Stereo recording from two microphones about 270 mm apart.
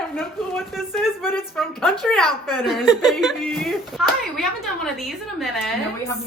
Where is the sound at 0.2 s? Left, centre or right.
Centre.